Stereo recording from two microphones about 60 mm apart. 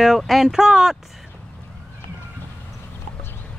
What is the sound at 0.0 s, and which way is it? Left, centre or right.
Speech, centre.